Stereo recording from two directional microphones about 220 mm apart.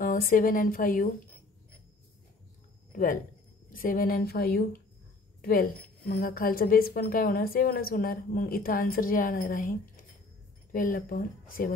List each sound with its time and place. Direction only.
0.0 s a woman's voice: 40° left (ahead or behind)
2.9 s a sound: 40° left (ahead or behind)
3.7 s a woman's voice: 40° left (ahead or behind)